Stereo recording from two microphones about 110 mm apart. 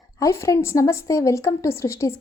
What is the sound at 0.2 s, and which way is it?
A woman's voice, 25° left (ahead or behind).